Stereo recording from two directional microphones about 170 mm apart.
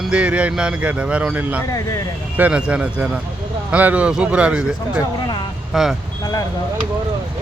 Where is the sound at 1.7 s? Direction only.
20° left (ahead or behind).